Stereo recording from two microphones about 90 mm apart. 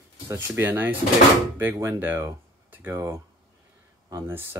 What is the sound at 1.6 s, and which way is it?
Speech, 30° right (ahead or behind).